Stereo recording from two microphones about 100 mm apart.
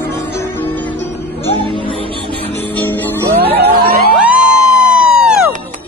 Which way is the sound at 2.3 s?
65° left (ahead or behind).